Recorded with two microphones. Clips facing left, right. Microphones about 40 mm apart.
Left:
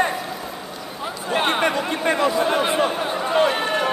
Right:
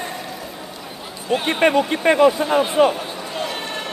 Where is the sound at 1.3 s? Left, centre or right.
Left.